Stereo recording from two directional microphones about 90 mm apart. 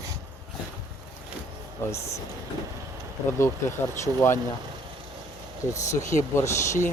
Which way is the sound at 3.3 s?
30° left (ahead or behind).